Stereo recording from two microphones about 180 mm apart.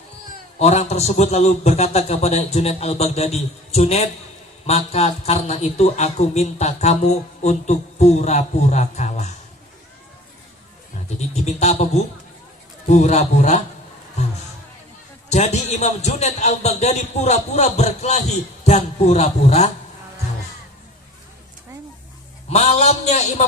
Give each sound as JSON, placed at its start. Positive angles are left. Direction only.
{"t": 0.6, "sound": "a man's voice", "side_deg": 40}
{"t": 11.3, "sound": "a man's voice", "side_deg": 40}
{"t": 12.9, "sound": "a man's voice", "side_deg": 40}
{"t": 14.2, "sound": "music", "side_deg": 40}
{"t": 15.3, "sound": "a man's voice", "side_deg": 40}
{"t": 22.4, "sound": "a man's voice", "side_deg": 35}